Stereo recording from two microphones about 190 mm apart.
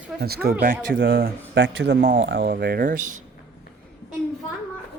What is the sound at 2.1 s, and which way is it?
Speech, 85° right.